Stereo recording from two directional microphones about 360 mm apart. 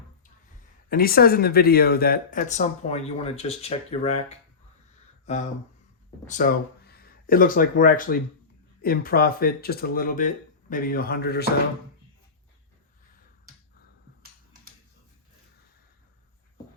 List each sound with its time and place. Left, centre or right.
0.9 s speech: left
6.2 s speech: left